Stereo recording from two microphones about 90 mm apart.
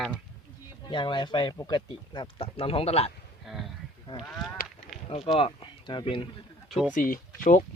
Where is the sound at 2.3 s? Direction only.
90° left.